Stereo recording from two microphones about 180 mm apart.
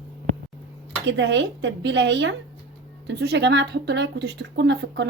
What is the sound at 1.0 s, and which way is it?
Speech, 80° right.